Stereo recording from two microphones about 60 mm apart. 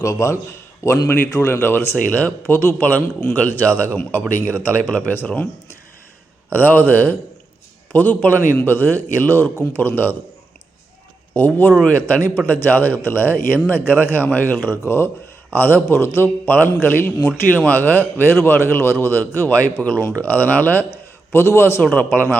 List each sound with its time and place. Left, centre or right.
0.0 s a man's voice: left
1.6 s speech: left
2.0 s speech: left
3.3 s a man's voice: left
6.5 s a man's voice: left
11.3 s a man's voice: left
19.2 s a man's voice: left
21.3 s a man's voice: left
21.8 s speech: left